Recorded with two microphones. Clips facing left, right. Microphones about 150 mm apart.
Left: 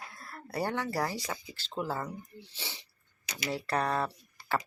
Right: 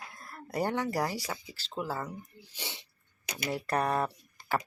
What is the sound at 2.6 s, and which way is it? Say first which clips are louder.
Speech: right 4 dB; 20° right (ahead or behind).